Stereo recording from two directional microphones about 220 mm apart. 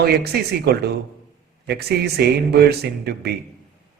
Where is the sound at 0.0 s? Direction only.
45° right (ahead or behind).